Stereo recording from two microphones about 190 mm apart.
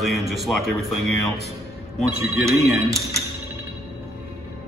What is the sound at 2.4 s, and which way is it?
Speech, 15° right (ahead or behind).